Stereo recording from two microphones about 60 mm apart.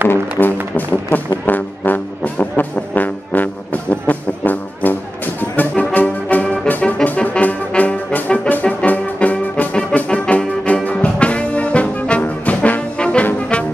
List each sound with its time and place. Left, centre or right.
0.1 s speech: left
1.4 s music: left
5.4 s brass instrument: left
6.3 s music: centre
7.1 s brass instrument: left
10.0 s music: centre